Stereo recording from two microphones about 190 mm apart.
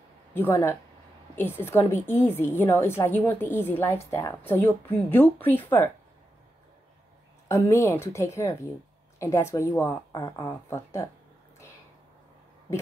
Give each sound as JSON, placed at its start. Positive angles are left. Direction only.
{"t": 0.3, "sound": "a woman's voice", "side_deg": 15}
{"t": 7.4, "sound": "a woman's voice", "side_deg": 15}